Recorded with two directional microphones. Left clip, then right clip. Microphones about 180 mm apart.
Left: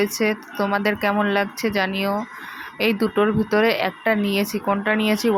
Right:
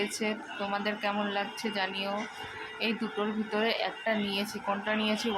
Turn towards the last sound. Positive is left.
turn(degrees=40)  # may be behind; listen again after turning